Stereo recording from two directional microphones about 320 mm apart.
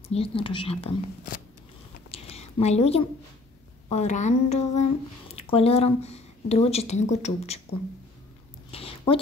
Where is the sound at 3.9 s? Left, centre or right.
Left.